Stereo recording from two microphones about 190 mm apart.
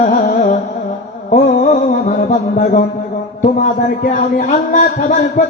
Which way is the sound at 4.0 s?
45° left (ahead or behind).